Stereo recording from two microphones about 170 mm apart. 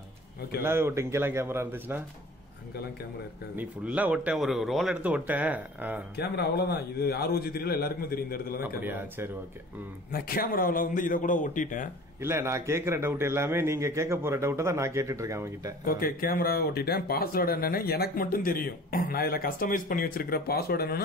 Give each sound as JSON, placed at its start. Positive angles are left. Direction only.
{"t": 0.6, "sound": "a man's voice", "side_deg": -15}
{"t": 3.5, "sound": "a man's voice", "side_deg": -10}
{"t": 6.1, "sound": "a man's voice", "side_deg": 75}
{"t": 8.5, "sound": "a man's voice", "side_deg": -15}
{"t": 10.1, "sound": "speech", "side_deg": 60}
{"t": 12.2, "sound": "a man's voice", "side_deg": -15}
{"t": 15.8, "sound": "speech", "side_deg": 60}